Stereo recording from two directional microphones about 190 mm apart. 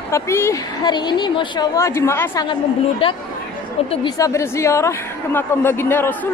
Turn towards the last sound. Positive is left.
turn(degrees=10)  # may be behind; listen again after turning